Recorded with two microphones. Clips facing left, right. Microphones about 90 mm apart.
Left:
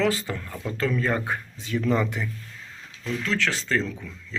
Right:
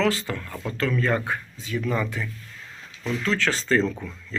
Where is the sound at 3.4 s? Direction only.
15° right (ahead or behind).